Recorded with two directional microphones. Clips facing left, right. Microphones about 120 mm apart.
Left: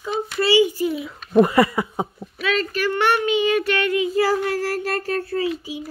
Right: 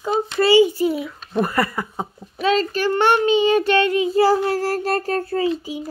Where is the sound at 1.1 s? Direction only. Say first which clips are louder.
Left 6 dB; 10° left (ahead or behind).